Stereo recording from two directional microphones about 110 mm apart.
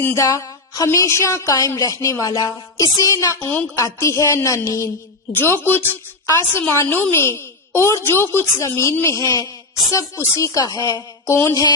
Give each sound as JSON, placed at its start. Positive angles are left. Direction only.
{"t": 0.0, "sound": "a woman's voice", "side_deg": 25}
{"t": 5.3, "sound": "a woman's voice", "side_deg": 20}
{"t": 11.3, "sound": "a woman's voice", "side_deg": 25}